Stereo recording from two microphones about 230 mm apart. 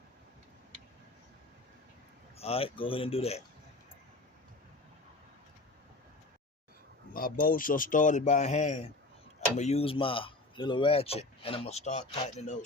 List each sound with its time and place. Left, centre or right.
2.4 s a man's voice: left
7.1 s a man's voice: left